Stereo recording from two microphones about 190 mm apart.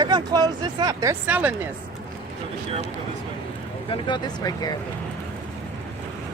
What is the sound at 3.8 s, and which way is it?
Speech, 25° left (ahead or behind).